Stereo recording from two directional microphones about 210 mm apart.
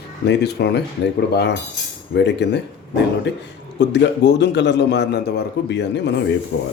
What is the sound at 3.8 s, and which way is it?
A man's voice, 55° left (ahead or behind).